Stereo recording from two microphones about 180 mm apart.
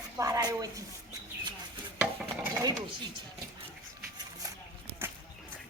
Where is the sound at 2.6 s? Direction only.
20° right (ahead or behind).